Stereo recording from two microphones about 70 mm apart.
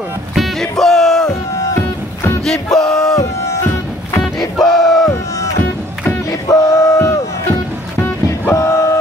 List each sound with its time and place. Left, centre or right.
0.3 s music: centre
1.3 s music: left
2.4 s music: centre
3.2 s music: left
4.4 s music: centre
6.4 s a sound: left
8.5 s crowd: left